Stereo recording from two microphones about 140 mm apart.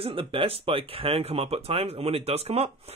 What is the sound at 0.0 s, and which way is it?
Speech, 40° right (ahead or behind).